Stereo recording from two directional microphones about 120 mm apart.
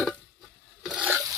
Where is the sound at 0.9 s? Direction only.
10° right (ahead or behind).